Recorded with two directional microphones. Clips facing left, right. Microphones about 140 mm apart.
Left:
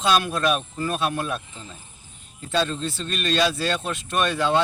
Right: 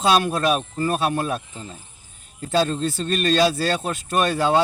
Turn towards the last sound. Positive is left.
turn(degrees=-40)  # may be behind; listen again after turning